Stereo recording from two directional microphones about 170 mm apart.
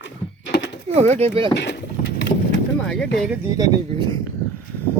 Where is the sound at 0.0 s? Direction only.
90° left.